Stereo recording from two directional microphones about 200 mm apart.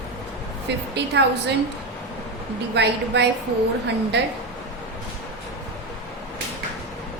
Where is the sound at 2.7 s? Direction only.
60° right (ahead or behind).